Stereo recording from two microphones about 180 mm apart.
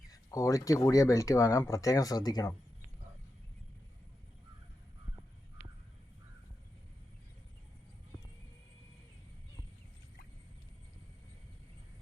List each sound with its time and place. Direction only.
0.1 s speech: 20° left (ahead or behind)